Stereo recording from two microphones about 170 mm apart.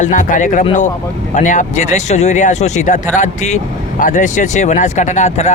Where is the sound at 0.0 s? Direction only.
50° left (ahead or behind).